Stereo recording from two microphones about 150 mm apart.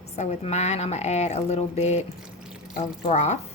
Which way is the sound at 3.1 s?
50° left (ahead or behind).